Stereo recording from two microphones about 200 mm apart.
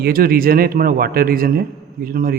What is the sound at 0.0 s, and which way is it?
A man's voice, 45° right (ahead or behind).